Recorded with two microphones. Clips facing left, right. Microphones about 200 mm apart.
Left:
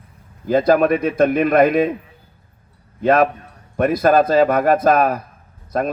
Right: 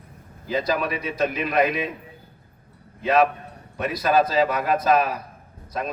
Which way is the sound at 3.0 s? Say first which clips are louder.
Left 4 dB; 50° left (ahead or behind).